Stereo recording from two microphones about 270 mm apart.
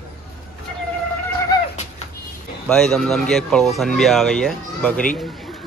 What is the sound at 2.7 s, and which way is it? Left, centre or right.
Speech, centre.